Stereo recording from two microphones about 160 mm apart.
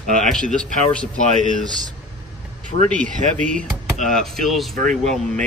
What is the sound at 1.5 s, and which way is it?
Speech, 50° right (ahead or behind).